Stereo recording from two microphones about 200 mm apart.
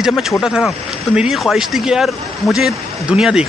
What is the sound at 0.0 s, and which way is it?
Speech, centre (ahead or behind).